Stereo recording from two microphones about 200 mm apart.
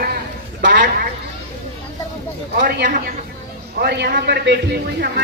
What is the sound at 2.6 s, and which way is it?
Speech, 45° right (ahead or behind).